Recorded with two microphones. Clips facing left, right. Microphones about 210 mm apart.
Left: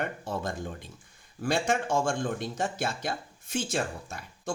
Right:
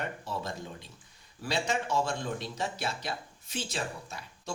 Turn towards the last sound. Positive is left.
turn(degrees=50)  # may be behind; listen again after turning